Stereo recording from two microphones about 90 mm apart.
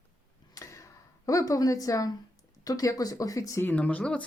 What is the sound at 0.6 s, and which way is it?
Tick-tock, 35° left (ahead or behind).